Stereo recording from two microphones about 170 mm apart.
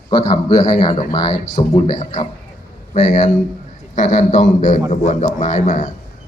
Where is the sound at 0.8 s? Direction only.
30° left (ahead or behind).